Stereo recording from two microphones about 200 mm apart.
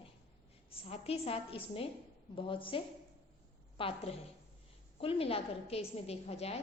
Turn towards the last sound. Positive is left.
turn(degrees=30)  # may be behind; listen again after turning